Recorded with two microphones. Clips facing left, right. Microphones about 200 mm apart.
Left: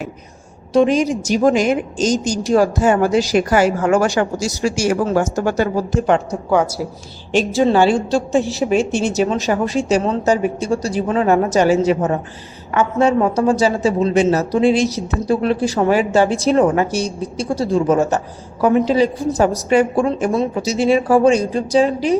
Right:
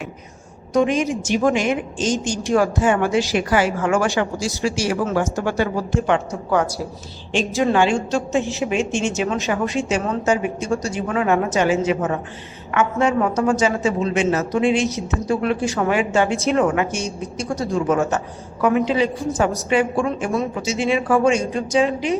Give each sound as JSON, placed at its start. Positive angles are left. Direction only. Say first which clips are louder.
{"t": 0.7, "sound": "a woman's voice", "louder": "left 4 dB", "side_deg": 30}
{"t": 7.3, "sound": "a woman's voice", "louder": "left 4 dB", "side_deg": 30}